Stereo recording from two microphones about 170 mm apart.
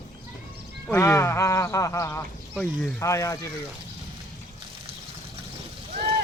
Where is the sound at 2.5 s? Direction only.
5° left (ahead or behind).